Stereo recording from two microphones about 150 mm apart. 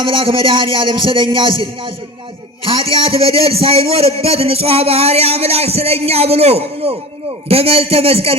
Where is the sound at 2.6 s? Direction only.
40° right (ahead or behind).